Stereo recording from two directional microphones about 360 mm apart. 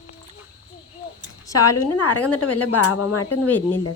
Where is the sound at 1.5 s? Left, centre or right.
Left.